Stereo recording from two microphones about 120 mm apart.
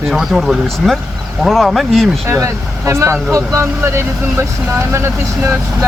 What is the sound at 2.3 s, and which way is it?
Speech, 25° right (ahead or behind).